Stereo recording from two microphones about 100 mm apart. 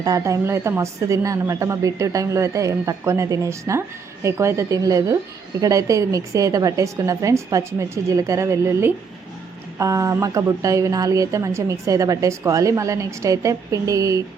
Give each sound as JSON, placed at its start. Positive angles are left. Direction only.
{"t": 0.0, "sound": "a woman's voice", "side_deg": -35}